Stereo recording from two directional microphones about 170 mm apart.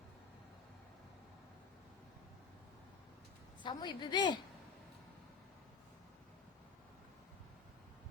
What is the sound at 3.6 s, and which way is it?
Speech, 25° left (ahead or behind).